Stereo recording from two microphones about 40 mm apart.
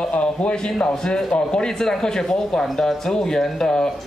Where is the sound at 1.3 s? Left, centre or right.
Left.